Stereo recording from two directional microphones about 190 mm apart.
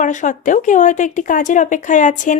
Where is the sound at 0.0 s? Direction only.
40° left (ahead or behind).